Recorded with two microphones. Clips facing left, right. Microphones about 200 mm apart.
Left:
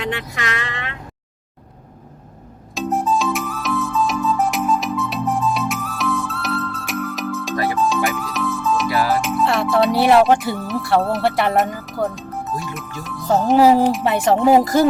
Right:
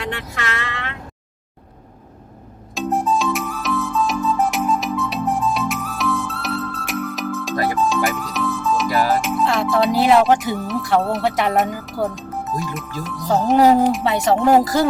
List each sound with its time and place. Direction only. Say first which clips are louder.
0.3 s speech: even; 15° left (ahead or behind)
2.7 s music: even; centre (ahead or behind)
9.0 s speech: even; centre (ahead or behind)